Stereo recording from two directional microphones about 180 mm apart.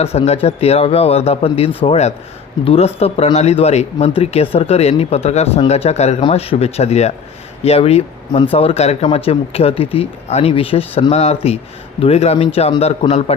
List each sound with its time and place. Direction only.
0.0 s speech: 35° left (ahead or behind)